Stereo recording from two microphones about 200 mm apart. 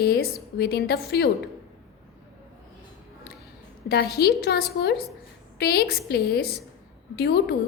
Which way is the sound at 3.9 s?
55° left (ahead or behind).